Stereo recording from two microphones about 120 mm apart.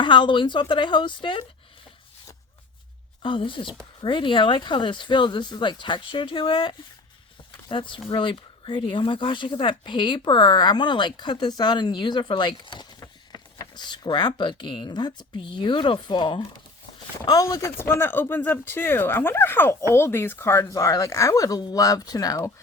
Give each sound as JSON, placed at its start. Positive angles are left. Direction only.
{"t": 0.0, "sound": "speech", "side_deg": 40}
{"t": 3.2, "sound": "speech", "side_deg": 45}